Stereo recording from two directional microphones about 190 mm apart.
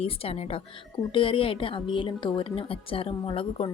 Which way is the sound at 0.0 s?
30° left (ahead or behind).